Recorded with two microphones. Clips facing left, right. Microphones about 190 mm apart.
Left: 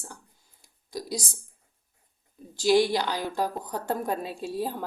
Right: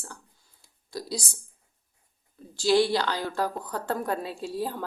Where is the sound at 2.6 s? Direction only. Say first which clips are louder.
Even; 15° left (ahead or behind).